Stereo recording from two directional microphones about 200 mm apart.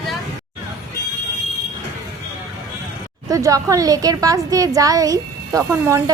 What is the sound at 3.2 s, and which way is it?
A woman's voice, 15° right (ahead or behind).